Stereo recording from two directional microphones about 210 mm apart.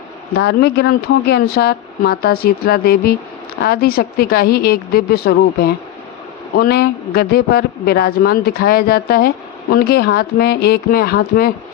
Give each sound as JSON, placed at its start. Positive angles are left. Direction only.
{"t": 0.3, "sound": "speech", "side_deg": 50}
{"t": 6.6, "sound": "speech", "side_deg": 45}